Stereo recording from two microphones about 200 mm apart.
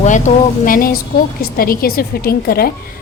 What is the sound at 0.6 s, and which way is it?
A woman's voice, 45° left (ahead or behind).